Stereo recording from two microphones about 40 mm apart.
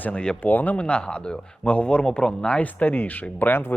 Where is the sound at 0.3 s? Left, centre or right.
Left.